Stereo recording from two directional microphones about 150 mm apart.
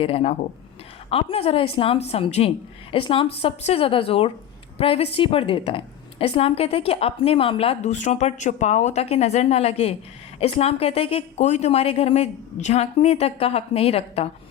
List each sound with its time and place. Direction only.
0.0 s a woman's voice: 40° left (ahead or behind)